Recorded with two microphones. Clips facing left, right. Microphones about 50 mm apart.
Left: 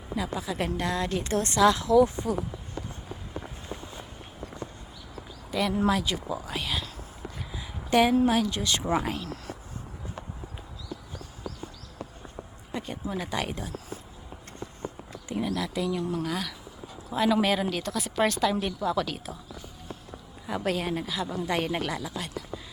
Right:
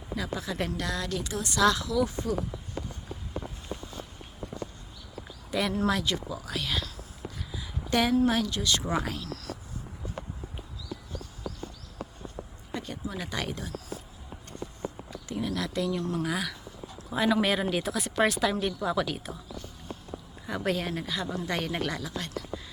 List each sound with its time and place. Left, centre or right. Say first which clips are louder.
0.2 s a woman's voice: left 2 dB; centre
0.8 s speech: left 3 dB; left
1.3 s speech: left 6 dB; left
1.5 s speech: left 5 dB; left
5.5 s a woman's voice: left 2 dB; centre
7.5 s a sound: left 4 dB; left
8.4 s speech: left 2 dB; left
12.7 s a woman's voice: left 2 dB; centre
15.3 s a woman's voice: left 2 dB; centre
16.2 s speech: right 1 dB; centre
20.5 s a woman's voice: left 1 dB; centre